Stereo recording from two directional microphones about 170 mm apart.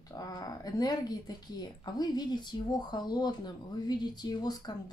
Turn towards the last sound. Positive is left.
turn(degrees=25)  # may be behind; listen again after turning